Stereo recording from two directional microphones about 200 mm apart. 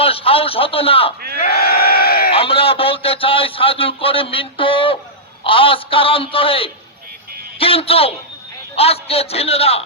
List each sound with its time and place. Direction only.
0.0 s a man's voice: 30° left (ahead or behind)
1.5 s crowd: 50° left (ahead or behind)
2.3 s a man's voice: 30° left (ahead or behind)